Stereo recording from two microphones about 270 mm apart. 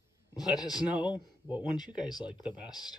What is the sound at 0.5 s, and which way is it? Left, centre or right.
Speech, centre.